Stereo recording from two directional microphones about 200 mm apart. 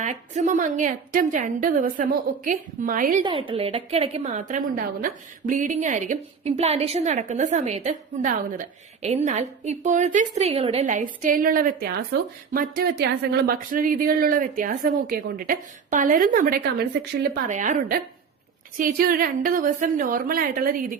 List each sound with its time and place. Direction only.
0.0 s a woman's voice: 40° right (ahead or behind)
3.2 s a woman's voice: 25° right (ahead or behind); by 20.9 s 45° right (ahead or behind)